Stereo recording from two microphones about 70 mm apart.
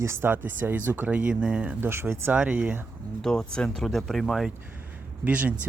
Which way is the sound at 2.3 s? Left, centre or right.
Centre.